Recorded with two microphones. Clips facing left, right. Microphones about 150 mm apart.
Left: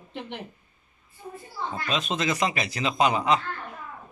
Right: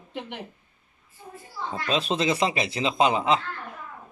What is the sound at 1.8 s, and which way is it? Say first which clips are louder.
Speech: right 4 dB; 30° right (ahead or behind).